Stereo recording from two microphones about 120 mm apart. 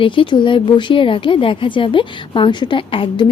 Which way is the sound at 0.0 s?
45° left (ahead or behind).